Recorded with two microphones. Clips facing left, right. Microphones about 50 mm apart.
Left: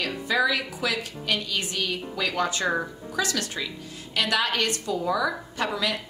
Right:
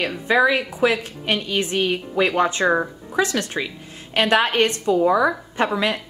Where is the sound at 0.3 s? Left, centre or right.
Right.